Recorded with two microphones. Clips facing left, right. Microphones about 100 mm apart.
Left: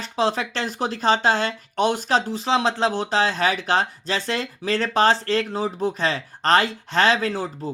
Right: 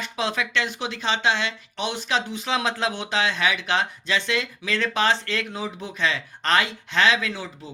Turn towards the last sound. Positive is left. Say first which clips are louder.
# left 6 dB
turn(degrees=40)  # may be behind; listen again after turning